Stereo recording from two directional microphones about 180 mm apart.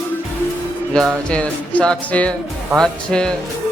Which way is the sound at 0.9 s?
5° left (ahead or behind).